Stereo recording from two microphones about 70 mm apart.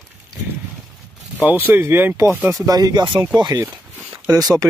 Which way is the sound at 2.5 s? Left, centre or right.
Right.